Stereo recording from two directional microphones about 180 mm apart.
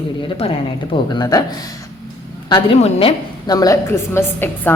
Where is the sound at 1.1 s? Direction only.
20° left (ahead or behind).